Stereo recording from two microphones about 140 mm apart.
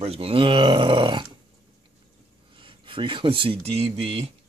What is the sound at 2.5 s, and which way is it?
Speech, 35° right (ahead or behind).